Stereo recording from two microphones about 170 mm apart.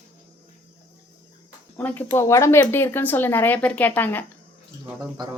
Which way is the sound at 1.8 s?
10° left (ahead or behind).